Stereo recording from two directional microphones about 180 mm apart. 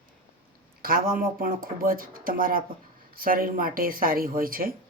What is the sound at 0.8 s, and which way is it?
Speech, 55° right (ahead or behind).